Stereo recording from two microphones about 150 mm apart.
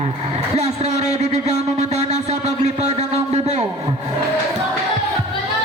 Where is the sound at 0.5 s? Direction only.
45° right (ahead or behind).